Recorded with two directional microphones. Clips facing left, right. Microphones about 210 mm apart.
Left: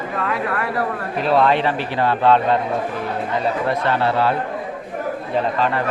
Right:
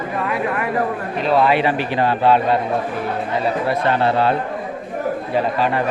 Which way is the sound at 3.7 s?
20° right (ahead or behind).